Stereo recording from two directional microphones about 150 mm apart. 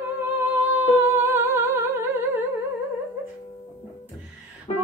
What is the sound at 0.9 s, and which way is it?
Humming, 15° right (ahead or behind).